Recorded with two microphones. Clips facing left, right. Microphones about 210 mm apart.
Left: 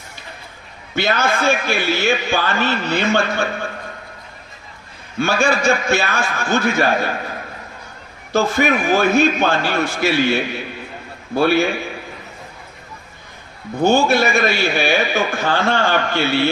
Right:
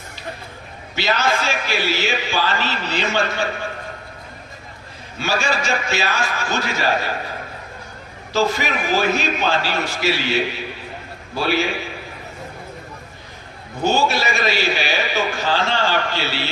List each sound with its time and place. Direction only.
0.9 s a man's voice: 55° left (ahead or behind)
5.2 s a man's voice: 50° left (ahead or behind)
8.3 s a man's voice: 55° left (ahead or behind)
13.8 s a man's voice: 55° left (ahead or behind)